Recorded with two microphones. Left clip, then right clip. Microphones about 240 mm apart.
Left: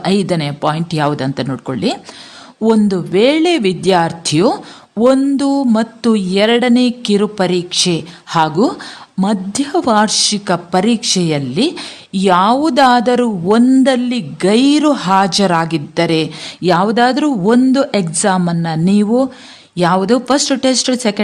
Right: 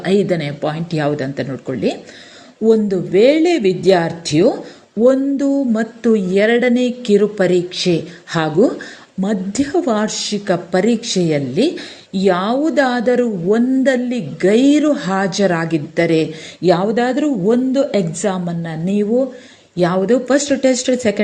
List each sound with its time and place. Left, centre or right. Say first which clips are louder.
0.0 s a woman's voice: even; centre